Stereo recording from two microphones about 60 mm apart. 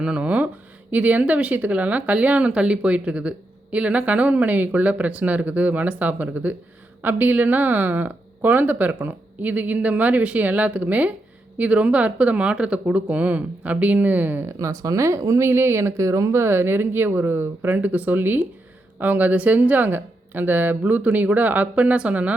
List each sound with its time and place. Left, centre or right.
0.0 s speech: centre
14.7 s speech: right
15.4 s speech: right